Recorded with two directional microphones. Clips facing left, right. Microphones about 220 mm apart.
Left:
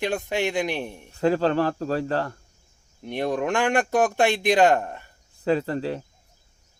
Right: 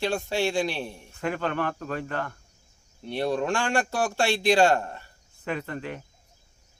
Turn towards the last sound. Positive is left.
turn(degrees=35)  # may be behind; listen again after turning